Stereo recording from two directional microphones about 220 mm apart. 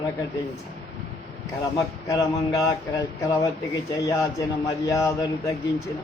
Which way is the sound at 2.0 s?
15° left (ahead or behind).